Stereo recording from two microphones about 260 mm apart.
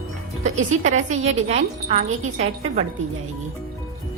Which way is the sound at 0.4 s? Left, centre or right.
Right.